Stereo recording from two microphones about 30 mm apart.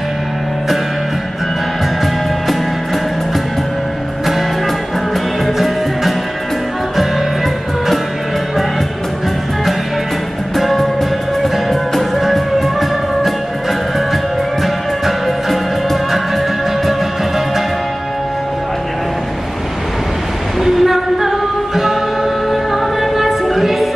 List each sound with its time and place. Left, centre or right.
10.5 s music: centre
14.6 s music: centre
20.6 s music: centre